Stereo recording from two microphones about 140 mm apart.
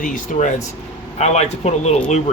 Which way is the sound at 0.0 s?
65° left (ahead or behind).